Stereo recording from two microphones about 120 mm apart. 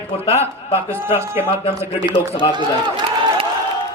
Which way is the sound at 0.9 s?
20° right (ahead or behind).